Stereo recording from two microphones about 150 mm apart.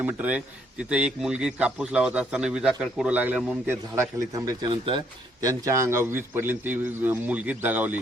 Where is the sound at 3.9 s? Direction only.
25° right (ahead or behind).